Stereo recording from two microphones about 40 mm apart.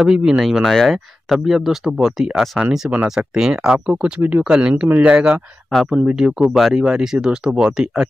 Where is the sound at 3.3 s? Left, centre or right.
Centre.